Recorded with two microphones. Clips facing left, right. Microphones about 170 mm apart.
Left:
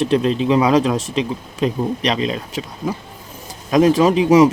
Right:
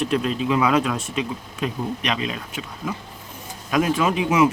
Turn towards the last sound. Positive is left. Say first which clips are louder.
# left 7 dB
turn(degrees=35)  # may be behind; listen again after turning